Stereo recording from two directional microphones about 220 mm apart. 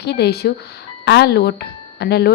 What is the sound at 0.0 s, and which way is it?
Speech, 50° left (ahead or behind).